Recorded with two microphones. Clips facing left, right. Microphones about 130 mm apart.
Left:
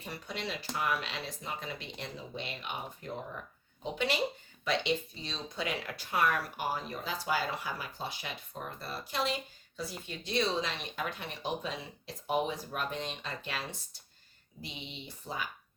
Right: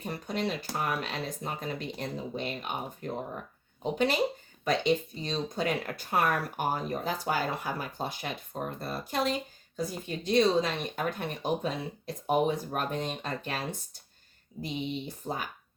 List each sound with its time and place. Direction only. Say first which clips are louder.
0.0 s speech: right 7 dB; 45° right (ahead or behind)
3.9 s speech: right 5 dB; 45° right (ahead or behind)